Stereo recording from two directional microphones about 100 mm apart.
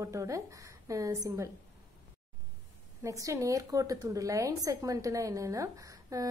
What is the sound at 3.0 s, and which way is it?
Speech, 30° right (ahead or behind).